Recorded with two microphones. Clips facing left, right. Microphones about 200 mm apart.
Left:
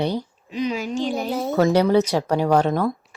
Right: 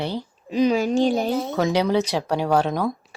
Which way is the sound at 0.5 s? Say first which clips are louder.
Right 6 dB; 35° right (ahead or behind).